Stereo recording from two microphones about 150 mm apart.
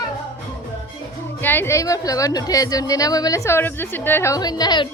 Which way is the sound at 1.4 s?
15° left (ahead or behind).